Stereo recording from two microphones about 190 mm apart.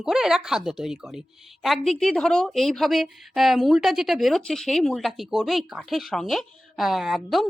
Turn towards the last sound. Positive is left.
turn(degrees=0)  # may be behind; listen again after turning